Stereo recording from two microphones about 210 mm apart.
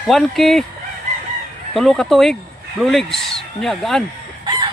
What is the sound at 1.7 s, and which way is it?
Speech, centre (ahead or behind).